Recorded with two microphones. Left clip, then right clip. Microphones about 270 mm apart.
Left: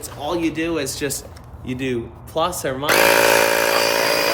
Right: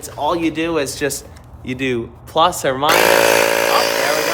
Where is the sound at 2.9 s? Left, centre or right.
Centre.